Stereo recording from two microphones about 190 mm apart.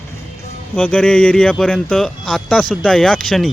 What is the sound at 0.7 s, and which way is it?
Speech, 5° left (ahead or behind).